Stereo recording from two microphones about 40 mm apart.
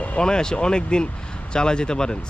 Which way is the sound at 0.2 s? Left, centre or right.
Centre.